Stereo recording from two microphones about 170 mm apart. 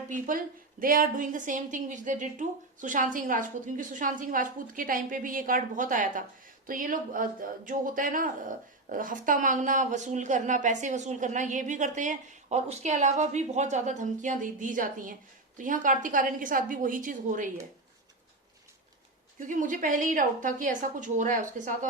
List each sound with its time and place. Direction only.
0.1 s a woman's voice: 55° right (ahead or behind)
19.4 s a woman's voice: 50° right (ahead or behind)